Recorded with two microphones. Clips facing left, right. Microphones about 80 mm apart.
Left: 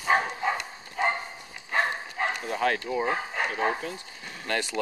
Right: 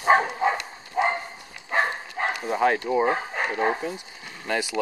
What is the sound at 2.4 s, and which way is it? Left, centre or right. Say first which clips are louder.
Speech: right 7 dB; centre.